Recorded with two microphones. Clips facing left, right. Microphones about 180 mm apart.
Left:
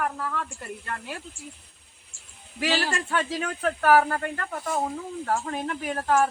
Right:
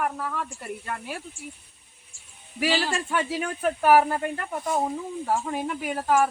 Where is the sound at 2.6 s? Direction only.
15° right (ahead or behind).